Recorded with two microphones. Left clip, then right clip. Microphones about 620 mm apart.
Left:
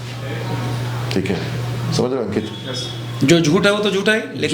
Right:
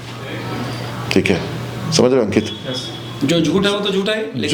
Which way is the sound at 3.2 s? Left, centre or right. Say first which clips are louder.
Left 2 dB; left.